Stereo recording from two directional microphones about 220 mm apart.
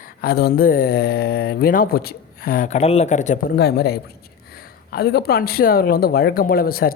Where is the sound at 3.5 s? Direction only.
45° left (ahead or behind).